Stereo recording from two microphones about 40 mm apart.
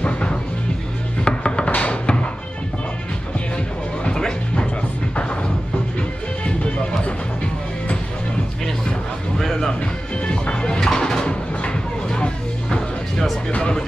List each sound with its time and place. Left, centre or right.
0.0 s music: left
5.9 s music: left
9.4 s music: centre
10.2 s music: left
10.8 s music: centre
11.2 s music: left
13.5 s music: left